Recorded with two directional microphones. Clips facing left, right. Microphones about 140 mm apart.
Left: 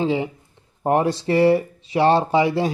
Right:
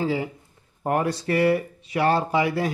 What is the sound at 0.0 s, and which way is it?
Speech, 20° left (ahead or behind).